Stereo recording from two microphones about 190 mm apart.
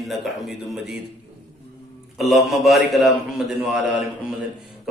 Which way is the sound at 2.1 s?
Centre (ahead or behind).